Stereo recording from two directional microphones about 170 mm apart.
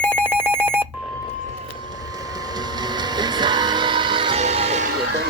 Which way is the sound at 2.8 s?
25° right (ahead or behind).